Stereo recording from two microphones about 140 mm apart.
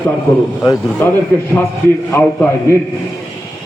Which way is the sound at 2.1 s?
20° left (ahead or behind).